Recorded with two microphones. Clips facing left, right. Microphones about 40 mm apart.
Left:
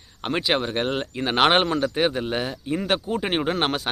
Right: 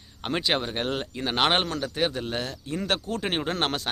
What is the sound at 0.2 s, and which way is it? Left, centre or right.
Speech, centre.